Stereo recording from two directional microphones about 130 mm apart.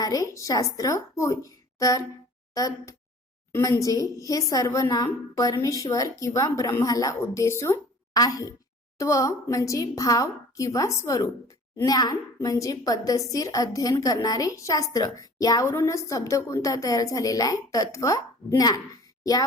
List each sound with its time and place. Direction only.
0.0 s a woman's voice: 25° left (ahead or behind)